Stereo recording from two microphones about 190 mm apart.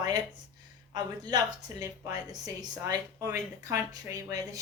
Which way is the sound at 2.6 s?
20° right (ahead or behind).